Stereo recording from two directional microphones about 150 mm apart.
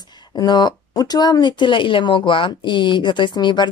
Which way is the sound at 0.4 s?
30° left (ahead or behind).